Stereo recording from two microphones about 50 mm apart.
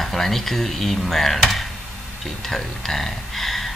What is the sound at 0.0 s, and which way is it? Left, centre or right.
Speech, centre.